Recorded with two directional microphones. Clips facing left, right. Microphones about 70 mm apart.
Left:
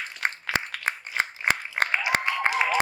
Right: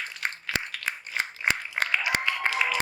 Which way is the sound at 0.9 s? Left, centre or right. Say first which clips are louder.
Left 3 dB; left.